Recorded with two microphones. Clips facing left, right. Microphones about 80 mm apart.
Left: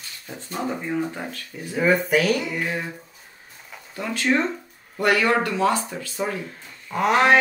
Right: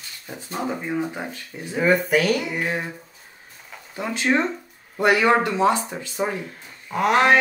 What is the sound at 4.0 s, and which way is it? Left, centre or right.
Speech, centre.